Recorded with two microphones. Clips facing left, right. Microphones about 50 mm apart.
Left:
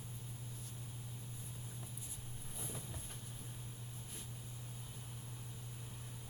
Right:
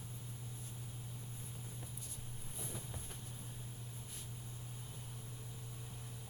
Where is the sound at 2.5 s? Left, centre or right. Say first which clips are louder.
Even; centre.